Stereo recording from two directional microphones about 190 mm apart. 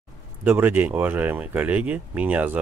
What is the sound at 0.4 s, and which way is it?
Speech, 10° right (ahead or behind).